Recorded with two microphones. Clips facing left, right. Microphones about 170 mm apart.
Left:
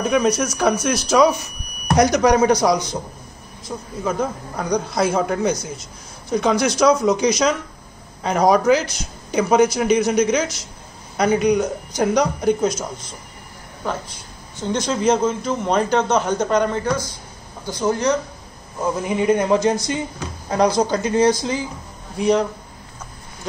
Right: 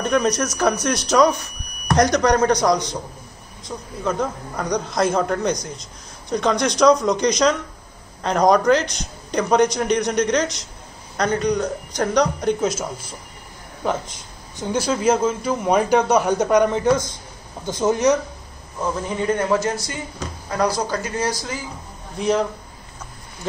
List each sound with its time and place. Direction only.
0.0 s a man's voice: 5° left (ahead or behind)
14.6 s a man's voice: 10° right (ahead or behind)
18.8 s speech: 15° left (ahead or behind)
22.2 s a man's voice: centre (ahead or behind)